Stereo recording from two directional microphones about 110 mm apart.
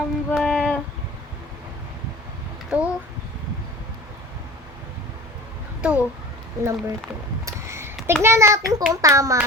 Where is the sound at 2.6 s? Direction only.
10° right (ahead or behind).